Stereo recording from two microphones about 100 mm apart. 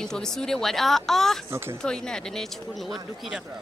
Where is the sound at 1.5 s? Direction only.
25° right (ahead or behind).